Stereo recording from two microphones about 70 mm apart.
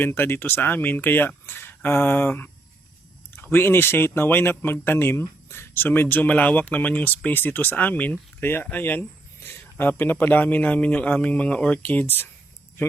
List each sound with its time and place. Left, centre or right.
0.0 s speech: left